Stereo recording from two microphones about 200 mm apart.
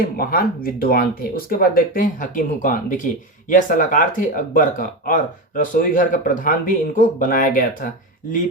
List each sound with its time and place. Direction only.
0.0 s speech: 45° left (ahead or behind)